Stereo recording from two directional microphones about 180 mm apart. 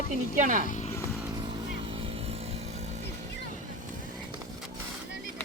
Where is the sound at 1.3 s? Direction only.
25° right (ahead or behind).